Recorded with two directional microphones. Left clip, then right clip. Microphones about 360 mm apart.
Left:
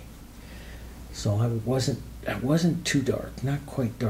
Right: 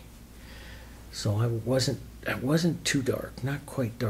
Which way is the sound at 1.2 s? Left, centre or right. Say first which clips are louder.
Left 2 dB; right.